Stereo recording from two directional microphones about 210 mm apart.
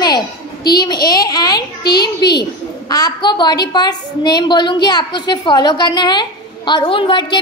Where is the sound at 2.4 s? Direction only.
20° left (ahead or behind).